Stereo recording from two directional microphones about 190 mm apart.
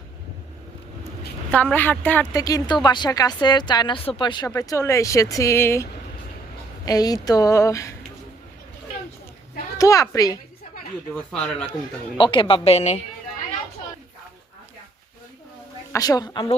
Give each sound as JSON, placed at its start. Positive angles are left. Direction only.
{"t": 1.5, "sound": "speech", "side_deg": 5}
{"t": 9.7, "sound": "speech", "side_deg": 15}
{"t": 11.1, "sound": "speech", "side_deg": 5}
{"t": 12.1, "sound": "speech", "side_deg": 25}
{"t": 15.9, "sound": "speech", "side_deg": 20}